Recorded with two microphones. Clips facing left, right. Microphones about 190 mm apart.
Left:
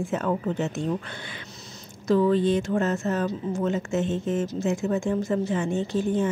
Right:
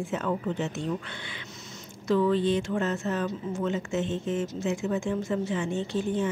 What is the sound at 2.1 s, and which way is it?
Speech, 40° left (ahead or behind).